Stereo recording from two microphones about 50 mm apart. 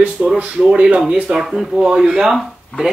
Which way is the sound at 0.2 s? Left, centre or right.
Right.